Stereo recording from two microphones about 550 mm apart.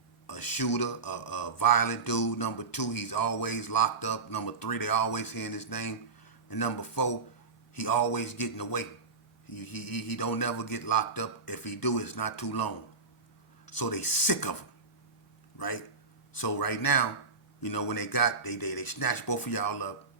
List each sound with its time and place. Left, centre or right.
0.3 s speech: left
15.5 s speech: left